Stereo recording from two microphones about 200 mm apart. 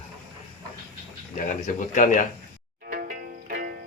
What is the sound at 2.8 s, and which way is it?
Music, 45° right (ahead or behind).